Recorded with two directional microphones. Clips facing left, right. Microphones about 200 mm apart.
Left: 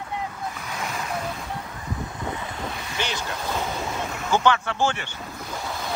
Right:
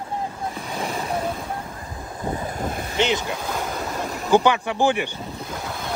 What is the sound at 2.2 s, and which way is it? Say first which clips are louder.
Vehicle: right 7 dB; 40° right (ahead or behind).